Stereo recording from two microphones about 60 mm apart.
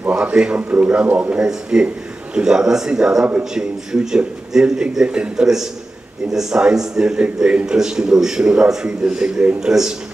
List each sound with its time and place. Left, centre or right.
0.2 s a man's voice: centre
1.5 s a man's voice: centre